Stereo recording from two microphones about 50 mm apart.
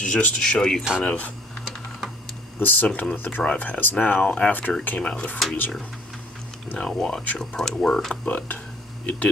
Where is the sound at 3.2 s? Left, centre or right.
Left.